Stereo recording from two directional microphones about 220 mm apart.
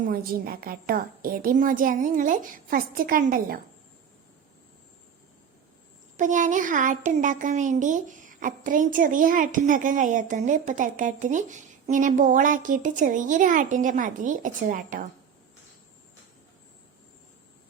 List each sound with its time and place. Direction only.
0.1 s speech: 40° right (ahead or behind)
6.1 s speech: 35° right (ahead or behind)